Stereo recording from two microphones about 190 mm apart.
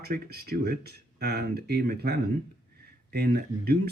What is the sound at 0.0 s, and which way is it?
Speech, 55° right (ahead or behind).